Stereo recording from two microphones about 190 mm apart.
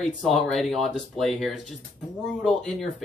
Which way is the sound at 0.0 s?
Centre (ahead or behind).